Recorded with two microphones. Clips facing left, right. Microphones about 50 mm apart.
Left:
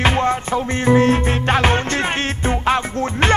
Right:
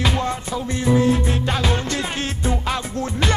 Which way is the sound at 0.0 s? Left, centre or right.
Left.